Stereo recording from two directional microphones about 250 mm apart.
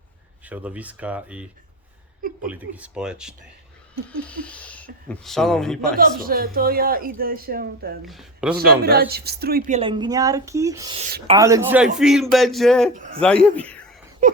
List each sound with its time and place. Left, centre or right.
0.4 s speech: centre
2.5 s speech: centre
6.0 s speech: right
8.0 s speech: centre
8.5 s a woman's voice: right; by 12.9 s centre
12.9 s speech: right
13.1 s speech: centre